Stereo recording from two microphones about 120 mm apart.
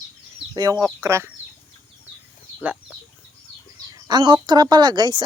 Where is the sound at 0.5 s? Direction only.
35° right (ahead or behind).